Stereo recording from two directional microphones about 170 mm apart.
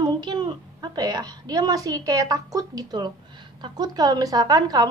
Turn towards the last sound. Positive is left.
turn(degrees=-25)  # may be behind; listen again after turning